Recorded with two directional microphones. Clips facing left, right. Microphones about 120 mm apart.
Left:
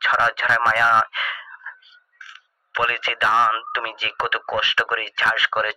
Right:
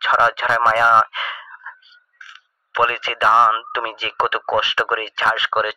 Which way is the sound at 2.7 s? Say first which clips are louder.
Right 4 dB; 30° right (ahead or behind).